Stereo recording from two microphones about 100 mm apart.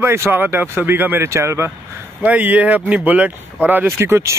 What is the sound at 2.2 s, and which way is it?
Speech, 15° right (ahead or behind).